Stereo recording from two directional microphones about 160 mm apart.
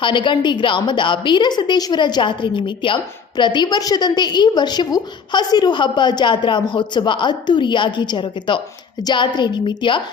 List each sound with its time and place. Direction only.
0.0 s a woman's voice: 30° left (ahead or behind)